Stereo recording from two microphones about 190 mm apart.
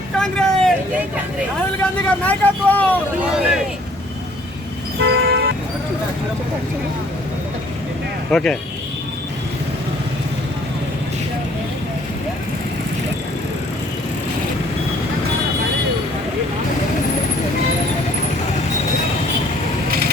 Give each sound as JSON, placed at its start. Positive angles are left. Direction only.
{"t": 0.2, "sound": "vehicle", "side_deg": 5}
{"t": 1.8, "sound": "speech", "side_deg": 10}
{"t": 4.9, "sound": "vehicle", "side_deg": -60}
{"t": 8.3, "sound": "speech", "side_deg": 5}